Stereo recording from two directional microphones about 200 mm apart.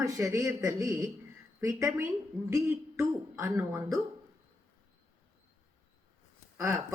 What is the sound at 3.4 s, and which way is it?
Speech, 15° right (ahead or behind).